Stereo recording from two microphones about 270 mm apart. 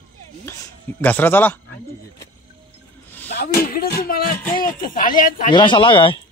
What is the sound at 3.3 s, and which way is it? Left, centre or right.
Speech, left.